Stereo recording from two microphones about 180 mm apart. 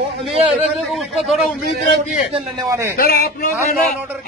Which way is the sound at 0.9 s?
Centre (ahead or behind).